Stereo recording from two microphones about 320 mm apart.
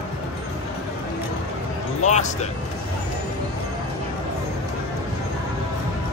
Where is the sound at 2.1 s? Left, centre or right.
Left.